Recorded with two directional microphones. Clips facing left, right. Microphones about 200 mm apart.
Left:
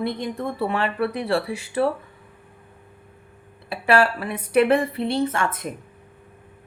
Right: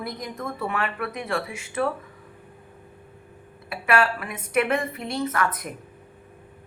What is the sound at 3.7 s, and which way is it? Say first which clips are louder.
Speech: left 3 dB; 30° left (ahead or behind).